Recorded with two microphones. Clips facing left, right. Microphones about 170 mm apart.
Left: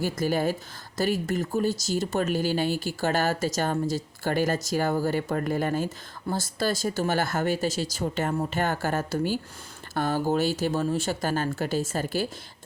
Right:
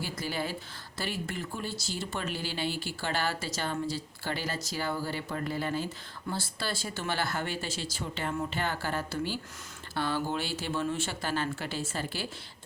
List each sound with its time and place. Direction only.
0.0 s speech: 45° left (ahead or behind)